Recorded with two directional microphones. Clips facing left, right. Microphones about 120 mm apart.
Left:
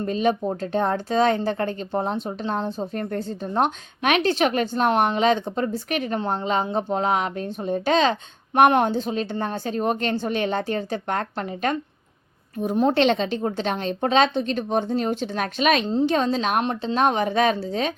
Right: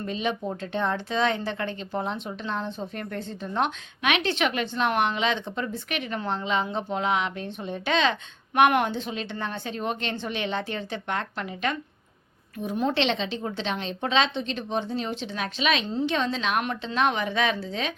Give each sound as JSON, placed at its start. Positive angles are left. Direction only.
{"t": 0.0, "sound": "a woman's voice", "side_deg": 40}
{"t": 15.9, "sound": "a woman's voice", "side_deg": 40}